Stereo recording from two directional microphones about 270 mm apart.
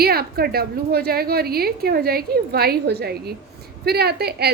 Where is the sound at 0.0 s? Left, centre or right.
Right.